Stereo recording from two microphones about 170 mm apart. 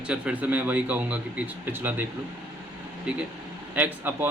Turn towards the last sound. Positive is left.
turn(degrees=-10)  # may be behind; listen again after turning